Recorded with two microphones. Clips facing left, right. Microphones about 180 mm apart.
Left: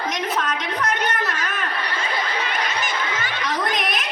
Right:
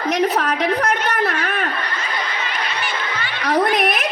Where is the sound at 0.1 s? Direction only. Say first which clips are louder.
Right 10 dB; 65° right (ahead or behind).